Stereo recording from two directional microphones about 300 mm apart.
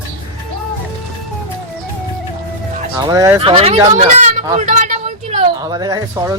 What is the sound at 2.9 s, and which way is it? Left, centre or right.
Speech, centre.